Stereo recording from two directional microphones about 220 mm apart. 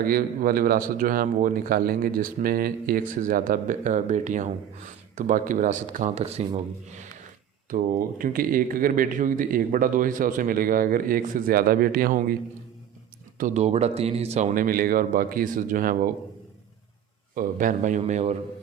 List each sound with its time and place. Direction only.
0.0 s speech: 40° right (ahead or behind)
13.4 s speech: 30° right (ahead or behind)
17.3 s speech: 40° right (ahead or behind)